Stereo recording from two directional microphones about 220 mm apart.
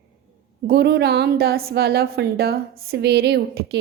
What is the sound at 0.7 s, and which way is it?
A woman's voice, 45° right (ahead or behind).